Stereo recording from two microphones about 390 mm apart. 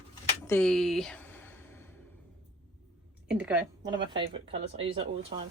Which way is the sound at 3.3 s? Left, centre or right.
Centre.